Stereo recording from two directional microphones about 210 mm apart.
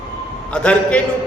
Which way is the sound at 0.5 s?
5° left (ahead or behind).